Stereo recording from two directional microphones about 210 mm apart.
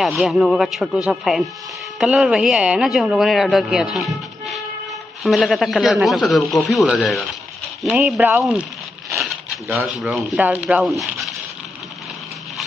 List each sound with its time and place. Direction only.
0.0 s speech: centre (ahead or behind)
9.1 s crumpling: centre (ahead or behind)
9.9 s speech: 5° right (ahead or behind)